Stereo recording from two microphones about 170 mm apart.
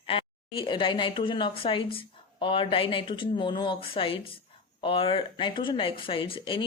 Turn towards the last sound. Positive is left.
turn(degrees=30)  # may be behind; listen again after turning